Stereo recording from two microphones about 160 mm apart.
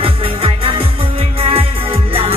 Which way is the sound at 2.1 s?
35° right (ahead or behind).